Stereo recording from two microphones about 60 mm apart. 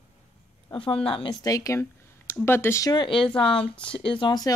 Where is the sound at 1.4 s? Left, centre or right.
Left.